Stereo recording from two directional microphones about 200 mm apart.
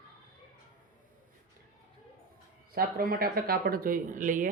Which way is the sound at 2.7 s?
50° right (ahead or behind).